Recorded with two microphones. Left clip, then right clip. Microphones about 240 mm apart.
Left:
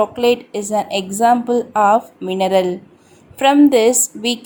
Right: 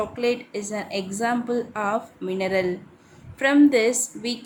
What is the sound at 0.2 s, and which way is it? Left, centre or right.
A woman's voice, left.